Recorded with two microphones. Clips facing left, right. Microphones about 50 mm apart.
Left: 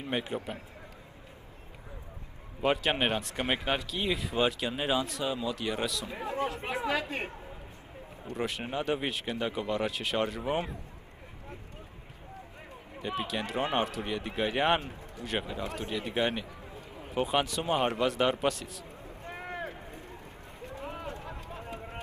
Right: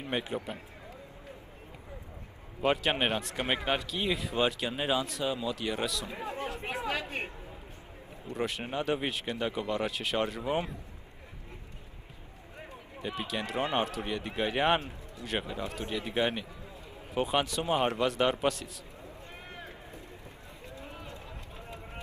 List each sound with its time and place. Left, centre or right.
0.1 s speech: centre
2.6 s speech: centre
6.3 s speech: left
8.4 s speech: centre
13.0 s speech: centre
19.2 s a sound: left
20.6 s run: left